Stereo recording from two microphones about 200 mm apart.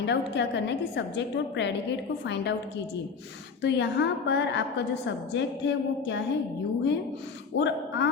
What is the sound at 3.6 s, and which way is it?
A woman's voice, 60° left (ahead or behind).